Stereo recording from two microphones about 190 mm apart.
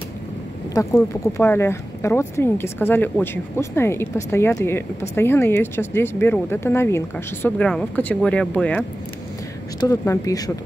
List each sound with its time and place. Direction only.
0.7 s speech: 15° left (ahead or behind)
9.8 s speech: 15° left (ahead or behind)